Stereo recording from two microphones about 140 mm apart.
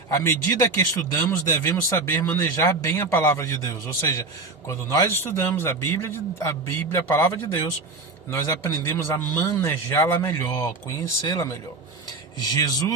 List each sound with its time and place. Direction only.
0.1 s speech: 20° left (ahead or behind)